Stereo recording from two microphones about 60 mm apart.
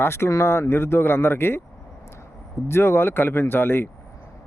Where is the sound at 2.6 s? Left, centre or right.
Left.